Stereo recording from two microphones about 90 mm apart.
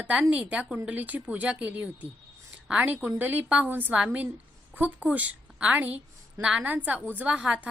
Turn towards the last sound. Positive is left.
turn(degrees=-15)  # may be behind; listen again after turning